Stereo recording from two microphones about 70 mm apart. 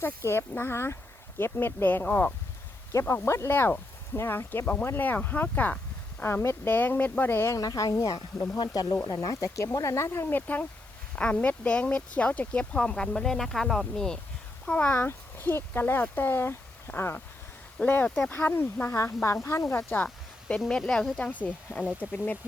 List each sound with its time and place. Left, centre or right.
0.3 s speech: left
2.9 s speech: left
6.2 s speech: left
7.5 s speech: left
8.5 s speech: left
9.0 s speech: left; by 14.2 s centre
14.8 s speech: left
17.8 s speech: left
18.9 s speech: left
20.7 s speech: centre
21.2 s speech: left